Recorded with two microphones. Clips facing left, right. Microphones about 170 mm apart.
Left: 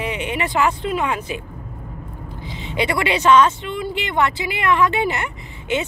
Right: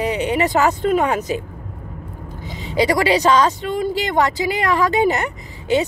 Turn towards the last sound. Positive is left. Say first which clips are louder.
# right 5 dB
turn(degrees=-40)  # may be behind; listen again after turning